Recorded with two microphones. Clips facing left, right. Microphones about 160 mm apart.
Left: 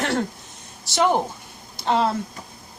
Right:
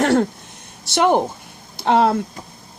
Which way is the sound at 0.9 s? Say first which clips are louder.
Right 4 dB; 60° right (ahead or behind).